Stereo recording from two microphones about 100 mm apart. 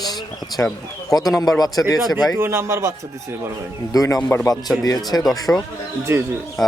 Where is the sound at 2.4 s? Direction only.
25° right (ahead or behind).